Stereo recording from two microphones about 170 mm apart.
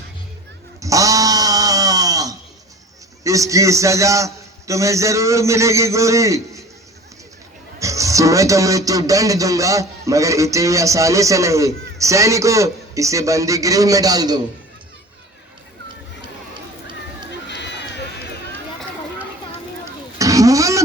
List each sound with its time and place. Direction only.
0.8 s a sound: 20° right (ahead or behind)
3.2 s a man's voice: 20° right (ahead or behind)
7.8 s a man's voice: 20° right (ahead or behind)
17.5 s run: 90° left
20.1 s pig: 20° right (ahead or behind)